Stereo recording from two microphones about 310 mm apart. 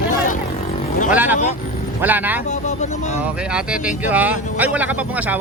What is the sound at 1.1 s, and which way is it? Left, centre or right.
Speech, centre.